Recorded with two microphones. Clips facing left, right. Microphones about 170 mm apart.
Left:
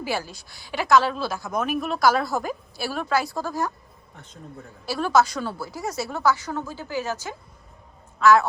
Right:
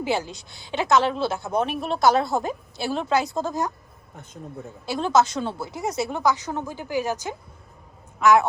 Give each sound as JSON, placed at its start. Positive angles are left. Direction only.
{"t": 0.0, "sound": "speech", "side_deg": -20}